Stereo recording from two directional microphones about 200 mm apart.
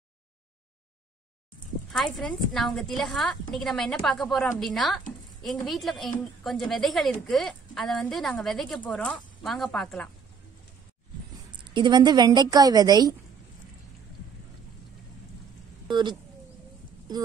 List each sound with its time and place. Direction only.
1.9 s a woman's voice: centre (ahead or behind)
11.6 s a woman's voice: 25° right (ahead or behind)
15.9 s a woman's voice: 20° right (ahead or behind)